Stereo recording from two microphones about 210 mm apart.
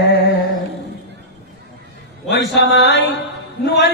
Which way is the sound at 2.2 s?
55° left (ahead or behind).